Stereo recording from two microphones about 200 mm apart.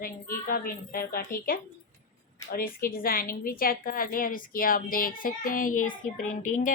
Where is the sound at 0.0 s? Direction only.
45° left (ahead or behind).